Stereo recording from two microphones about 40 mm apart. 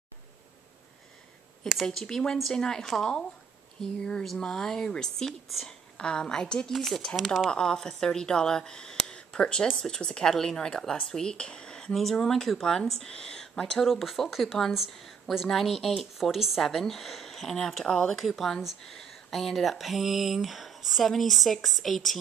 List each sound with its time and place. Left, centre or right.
1.9 s a woman's voice: centre
6.7 s speech: centre
7.5 s a woman's voice: centre
11.9 s a woman's voice: centre
13.8 s a woman's voice: centre
16.6 s a woman's voice: centre